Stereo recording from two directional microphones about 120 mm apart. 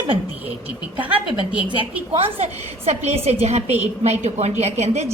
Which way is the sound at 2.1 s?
55° right (ahead or behind).